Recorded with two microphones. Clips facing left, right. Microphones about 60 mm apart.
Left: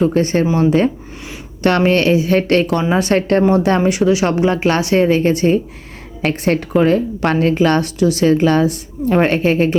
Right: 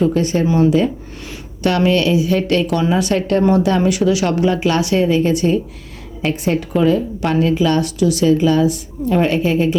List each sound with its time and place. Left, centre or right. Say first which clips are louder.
0.1 s a woman's voice: left 2 dB; left
1.6 s a woman's voice: left 2 dB; left
6.2 s a woman's voice: left 2 dB; left
7.9 s a woman's voice: left 1 dB; left